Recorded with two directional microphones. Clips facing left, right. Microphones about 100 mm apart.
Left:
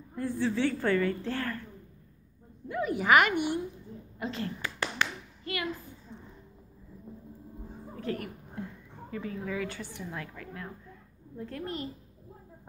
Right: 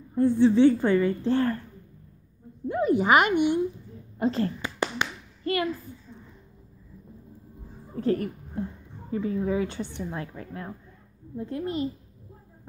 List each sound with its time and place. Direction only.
0.1 s a woman's voice: 25° right (ahead or behind)
2.7 s a woman's voice: 30° right (ahead or behind)
4.2 s speech: 40° right (ahead or behind)
4.6 s a sound: 20° right (ahead or behind)
5.4 s speech: 40° right (ahead or behind)
7.9 s a woman's voice: 35° right (ahead or behind)
11.3 s a woman's voice: 20° right (ahead or behind)